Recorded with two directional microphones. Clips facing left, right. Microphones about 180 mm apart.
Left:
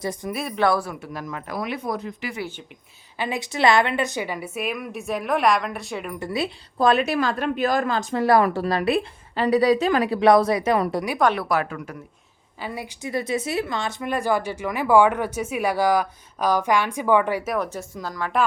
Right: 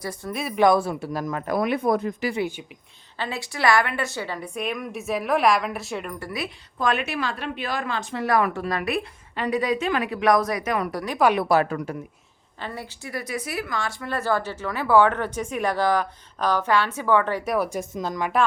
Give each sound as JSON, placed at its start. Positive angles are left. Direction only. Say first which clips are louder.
{"t": 0.0, "sound": "speech", "louder": "left 3 dB", "side_deg": 20}
{"t": 0.5, "sound": "speech", "louder": "right 3 dB", "side_deg": -15}
{"t": 0.8, "sound": "speech", "louder": "right 4 dB", "side_deg": -30}
{"t": 3.2, "sound": "a woman's voice", "louder": "left 4 dB", "side_deg": 15}
{"t": 6.1, "sound": "a woman's voice", "louder": "left 5 dB", "side_deg": 25}
{"t": 11.3, "sound": "a woman's voice", "louder": "right 4 dB", "side_deg": -30}
{"t": 12.5, "sound": "speech", "louder": "left 2 dB", "side_deg": 10}
{"t": 17.4, "sound": "a woman's voice", "louder": "right 1 dB", "side_deg": 0}
{"t": 17.7, "sound": "a woman's voice", "louder": "right 4 dB", "side_deg": -20}